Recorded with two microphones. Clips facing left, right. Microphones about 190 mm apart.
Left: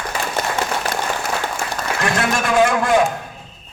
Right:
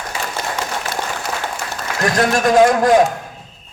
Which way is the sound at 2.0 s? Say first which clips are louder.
Right 5 dB; 40° right (ahead or behind).